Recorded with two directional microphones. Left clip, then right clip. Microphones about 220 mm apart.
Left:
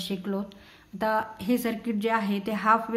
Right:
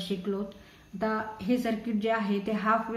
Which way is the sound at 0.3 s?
50° left (ahead or behind).